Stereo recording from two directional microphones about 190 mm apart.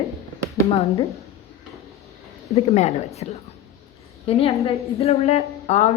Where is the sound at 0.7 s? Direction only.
30° left (ahead or behind).